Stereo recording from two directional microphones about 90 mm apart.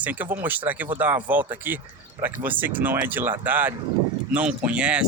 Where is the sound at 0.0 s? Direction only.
20° right (ahead or behind).